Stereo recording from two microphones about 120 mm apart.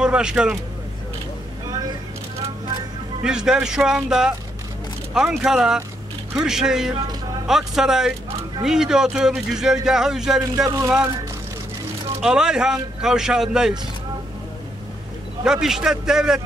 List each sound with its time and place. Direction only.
0.0 s speech: 10° right (ahead or behind)
3.3 s speech: 5° right (ahead or behind)
10.4 s speech: 30° right (ahead or behind)
12.2 s speech: 5° right (ahead or behind)
15.4 s speech: 5° right (ahead or behind)